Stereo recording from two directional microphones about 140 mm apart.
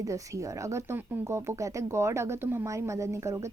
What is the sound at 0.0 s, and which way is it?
Speech, 25° right (ahead or behind).